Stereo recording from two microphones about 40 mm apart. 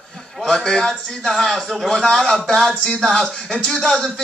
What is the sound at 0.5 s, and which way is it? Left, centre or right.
Speech, centre.